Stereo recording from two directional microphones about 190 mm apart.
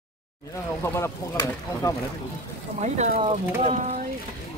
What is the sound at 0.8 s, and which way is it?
Speech, 15° left (ahead or behind).